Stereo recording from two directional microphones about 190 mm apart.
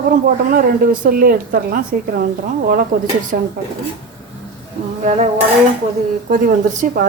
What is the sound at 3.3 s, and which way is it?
Speech, 50° right (ahead or behind).